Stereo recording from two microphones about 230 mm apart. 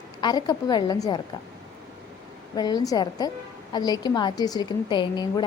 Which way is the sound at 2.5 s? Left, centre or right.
Centre.